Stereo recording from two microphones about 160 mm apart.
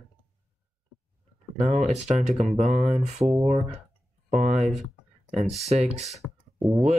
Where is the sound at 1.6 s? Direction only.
45° right (ahead or behind).